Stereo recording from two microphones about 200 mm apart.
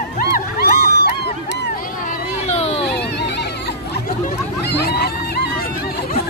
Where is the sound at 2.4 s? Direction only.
30° left (ahead or behind).